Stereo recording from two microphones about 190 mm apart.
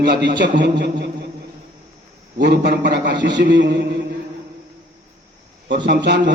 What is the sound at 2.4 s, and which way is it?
A man's voice, 60° right (ahead or behind).